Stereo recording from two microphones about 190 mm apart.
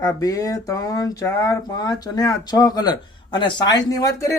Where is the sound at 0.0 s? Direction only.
20° left (ahead or behind).